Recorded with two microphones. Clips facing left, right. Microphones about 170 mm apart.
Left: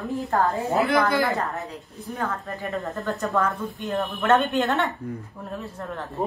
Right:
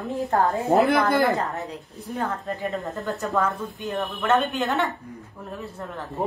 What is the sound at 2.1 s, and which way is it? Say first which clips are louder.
Speech: right 2 dB; 20° right (ahead or behind).